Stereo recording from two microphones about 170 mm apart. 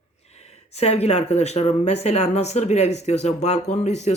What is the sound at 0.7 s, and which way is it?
Speech, 40° left (ahead or behind).